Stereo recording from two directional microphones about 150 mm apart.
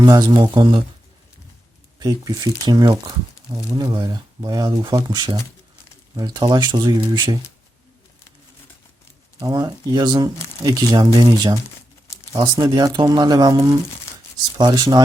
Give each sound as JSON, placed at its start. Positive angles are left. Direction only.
{"t": 0.0, "sound": "speech", "side_deg": -25}
{"t": 2.0, "sound": "speech", "side_deg": -25}
{"t": 9.4, "sound": "speech", "side_deg": -25}